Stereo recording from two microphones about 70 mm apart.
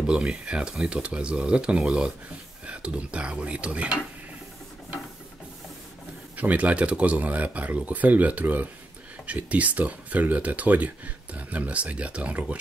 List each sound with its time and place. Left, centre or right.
0.0 s speech: centre
6.3 s speech: right